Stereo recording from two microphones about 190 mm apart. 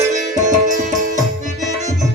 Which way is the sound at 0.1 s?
40° right (ahead or behind).